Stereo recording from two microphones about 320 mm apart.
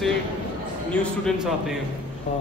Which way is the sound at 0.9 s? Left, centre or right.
Centre.